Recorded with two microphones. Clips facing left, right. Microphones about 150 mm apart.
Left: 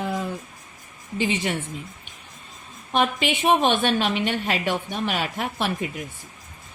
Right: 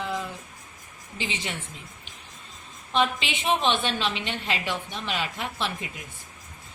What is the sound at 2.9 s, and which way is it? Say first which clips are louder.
A woman's voice: left 3 dB; 55° left (ahead or behind).